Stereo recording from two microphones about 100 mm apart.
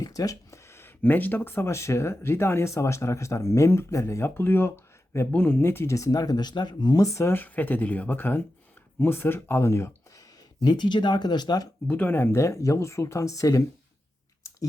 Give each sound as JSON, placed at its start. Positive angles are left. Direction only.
{"t": 0.0, "sound": "speech", "side_deg": 35}
{"t": 10.6, "sound": "speech", "side_deg": 45}
{"t": 11.9, "sound": "speech", "side_deg": 20}